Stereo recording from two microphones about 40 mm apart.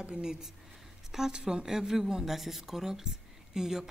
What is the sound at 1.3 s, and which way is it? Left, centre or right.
Speech, centre.